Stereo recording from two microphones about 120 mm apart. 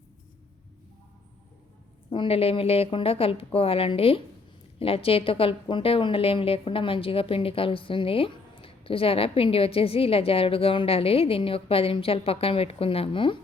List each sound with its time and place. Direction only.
2.0 s a woman's voice: 45° left (ahead or behind)